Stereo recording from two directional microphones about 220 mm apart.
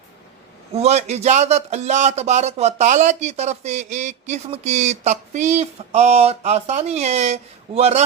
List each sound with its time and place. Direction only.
0.7 s a man's voice: 30° right (ahead or behind)